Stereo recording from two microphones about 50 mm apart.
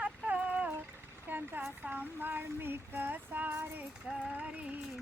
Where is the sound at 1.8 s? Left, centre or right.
Right.